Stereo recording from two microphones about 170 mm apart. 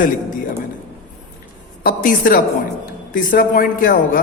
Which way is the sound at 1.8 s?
55° left (ahead or behind).